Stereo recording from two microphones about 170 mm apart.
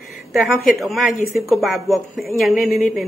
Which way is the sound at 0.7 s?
Centre (ahead or behind).